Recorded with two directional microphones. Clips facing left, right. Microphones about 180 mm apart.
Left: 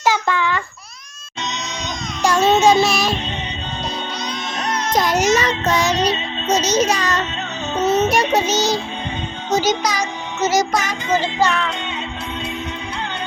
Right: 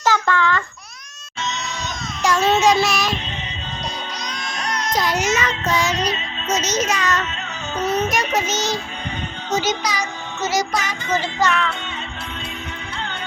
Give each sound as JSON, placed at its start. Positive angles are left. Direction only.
{"t": 0.0, "sound": "babbling", "side_deg": 15}
{"t": 2.2, "sound": "child singing", "side_deg": 25}
{"t": 4.9, "sound": "music", "side_deg": 45}
{"t": 11.1, "sound": "music", "side_deg": 30}